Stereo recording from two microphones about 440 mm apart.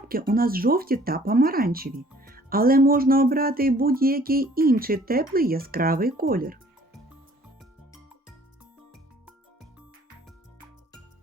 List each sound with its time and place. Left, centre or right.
0.1 s speech: centre